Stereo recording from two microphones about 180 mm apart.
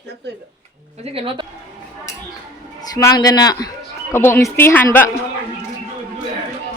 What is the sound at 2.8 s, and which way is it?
A man's voice, 20° left (ahead or behind).